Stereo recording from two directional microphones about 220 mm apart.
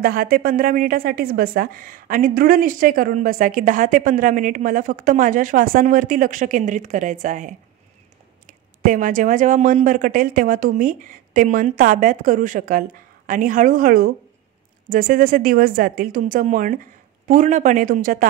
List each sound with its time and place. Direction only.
0.0 s a woman's voice: 40° right (ahead or behind)